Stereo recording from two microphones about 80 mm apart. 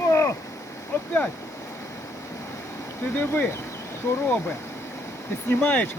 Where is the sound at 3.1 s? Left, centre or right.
Left.